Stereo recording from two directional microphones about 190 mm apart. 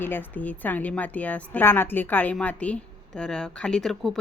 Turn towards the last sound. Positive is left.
turn(degrees=0)  # may be behind; listen again after turning